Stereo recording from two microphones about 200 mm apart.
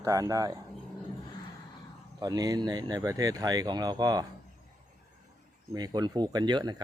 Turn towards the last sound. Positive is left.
turn(degrees=-20)  # may be behind; listen again after turning